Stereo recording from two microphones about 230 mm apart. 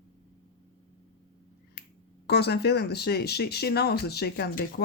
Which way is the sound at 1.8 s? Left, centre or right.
Left.